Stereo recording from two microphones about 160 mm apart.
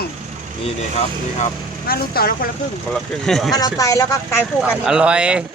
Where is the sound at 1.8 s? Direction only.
70° left (ahead or behind).